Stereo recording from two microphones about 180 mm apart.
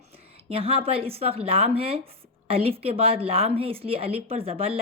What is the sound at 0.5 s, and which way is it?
A woman's voice, 35° right (ahead or behind).